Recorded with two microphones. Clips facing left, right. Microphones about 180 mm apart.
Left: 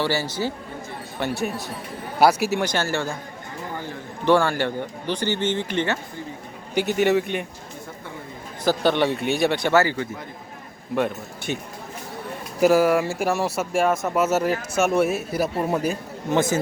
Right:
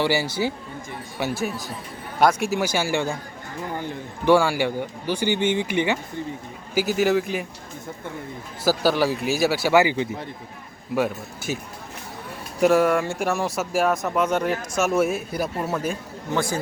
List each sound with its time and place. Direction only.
0.0 s speech: 10° right (ahead or behind)
1.2 s speech: centre (ahead or behind)
4.3 s speech: 10° right (ahead or behind)
6.7 s speech: centre (ahead or behind)
8.6 s speech: 5° right (ahead or behind)
10.9 s speech: 5° right (ahead or behind)
15.6 s a man's voice: 15° left (ahead or behind)